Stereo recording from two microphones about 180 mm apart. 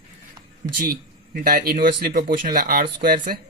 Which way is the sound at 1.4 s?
55° right (ahead or behind).